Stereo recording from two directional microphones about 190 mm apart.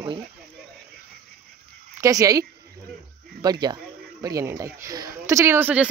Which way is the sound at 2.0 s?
20° right (ahead or behind).